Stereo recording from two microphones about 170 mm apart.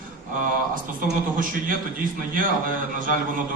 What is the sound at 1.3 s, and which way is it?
Speech, 55° right (ahead or behind).